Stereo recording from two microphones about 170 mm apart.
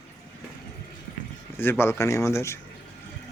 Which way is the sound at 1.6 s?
15° left (ahead or behind).